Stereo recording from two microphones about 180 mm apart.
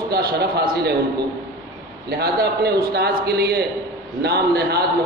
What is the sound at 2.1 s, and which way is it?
A man's voice, 60° right (ahead or behind).